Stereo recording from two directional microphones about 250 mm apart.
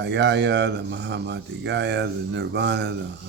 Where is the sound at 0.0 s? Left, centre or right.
Right.